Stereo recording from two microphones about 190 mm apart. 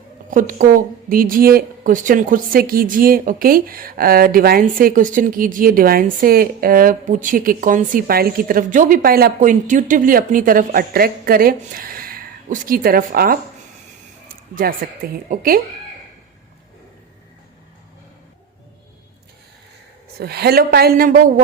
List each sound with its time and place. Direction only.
0.3 s a woman's voice: 45° right (ahead or behind)
14.5 s a woman's voice: 50° right (ahead or behind)
20.1 s a woman's voice: 55° right (ahead or behind)